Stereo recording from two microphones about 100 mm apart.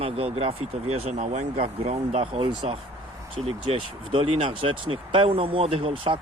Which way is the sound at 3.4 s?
75° right (ahead or behind).